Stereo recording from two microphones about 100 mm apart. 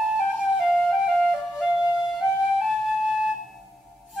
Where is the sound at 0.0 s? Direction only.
5° right (ahead or behind).